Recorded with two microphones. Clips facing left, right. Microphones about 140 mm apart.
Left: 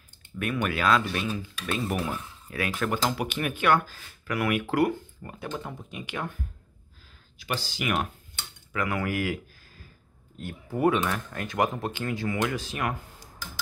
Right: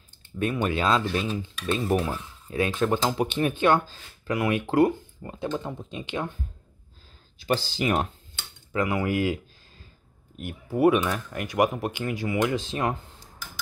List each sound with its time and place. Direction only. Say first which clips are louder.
0.4 s speech: right 2 dB; 25° right (ahead or behind)